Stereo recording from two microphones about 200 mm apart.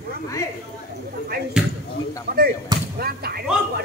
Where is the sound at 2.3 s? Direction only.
50° right (ahead or behind).